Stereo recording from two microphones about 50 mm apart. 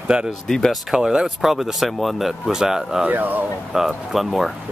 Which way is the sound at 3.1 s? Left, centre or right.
Right.